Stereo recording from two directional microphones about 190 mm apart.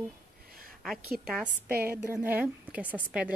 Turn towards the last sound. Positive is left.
turn(degrees=-5)  # may be behind; listen again after turning